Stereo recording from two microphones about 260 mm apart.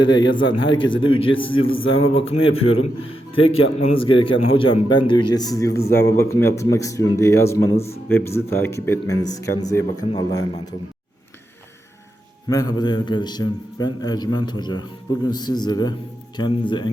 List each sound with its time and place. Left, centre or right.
0.0 s a man's voice: centre
12.5 s a man's voice: centre